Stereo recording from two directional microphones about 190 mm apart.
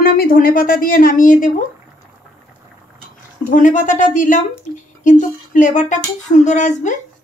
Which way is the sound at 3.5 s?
45° left (ahead or behind).